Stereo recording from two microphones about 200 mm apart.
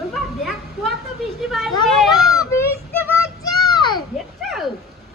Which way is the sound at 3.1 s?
15° left (ahead or behind).